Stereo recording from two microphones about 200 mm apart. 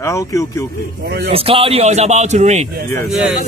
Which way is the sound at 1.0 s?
55° right (ahead or behind).